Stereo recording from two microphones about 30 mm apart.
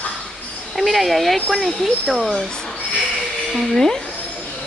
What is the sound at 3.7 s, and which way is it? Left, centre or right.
Speech, centre.